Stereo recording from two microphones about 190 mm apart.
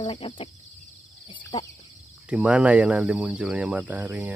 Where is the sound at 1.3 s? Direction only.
25° left (ahead or behind).